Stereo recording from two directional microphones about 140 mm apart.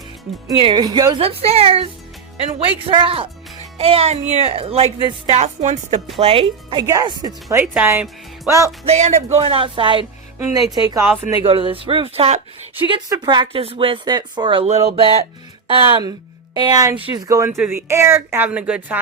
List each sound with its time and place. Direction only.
0.5 s speech: 35° right (ahead or behind)
1.2 s speech: 45° right (ahead or behind)
5.3 s speech: 55° right (ahead or behind)
6.1 s speech: 40° right (ahead or behind)
7.5 s speech: 10° right (ahead or behind)
8.9 s speech: 50° right (ahead or behind)
10.8 s speech: 25° right (ahead or behind)
11.4 s speech: 40° right (ahead or behind)
13.1 s speech: 30° right (ahead or behind)
16.6 s speech: 25° right (ahead or behind); by 18.9 s 10° right (ahead or behind)